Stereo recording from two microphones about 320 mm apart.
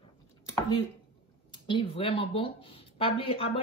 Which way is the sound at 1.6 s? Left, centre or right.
Centre.